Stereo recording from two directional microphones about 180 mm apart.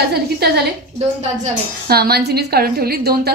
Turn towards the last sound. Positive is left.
turn(degrees=-60)  # may be behind; listen again after turning